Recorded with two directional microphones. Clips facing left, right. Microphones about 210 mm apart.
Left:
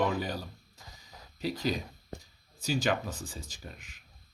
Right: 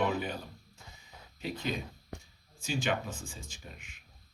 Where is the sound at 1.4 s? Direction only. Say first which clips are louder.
Left 4 dB; 35° left (ahead or behind).